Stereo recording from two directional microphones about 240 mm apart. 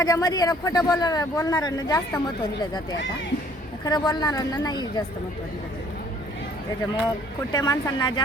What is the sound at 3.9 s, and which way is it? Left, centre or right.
Speech, centre.